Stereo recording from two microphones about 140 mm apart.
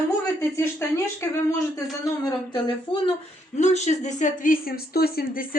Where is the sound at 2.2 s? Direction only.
35° left (ahead or behind).